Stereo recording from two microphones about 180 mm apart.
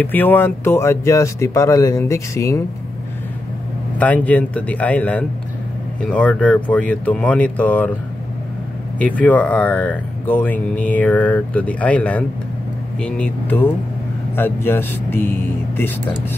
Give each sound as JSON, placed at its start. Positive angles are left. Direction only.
{"t": 0.0, "sound": "speech", "side_deg": 10}
{"t": 4.0, "sound": "speech", "side_deg": 10}
{"t": 8.9, "sound": "speech", "side_deg": 5}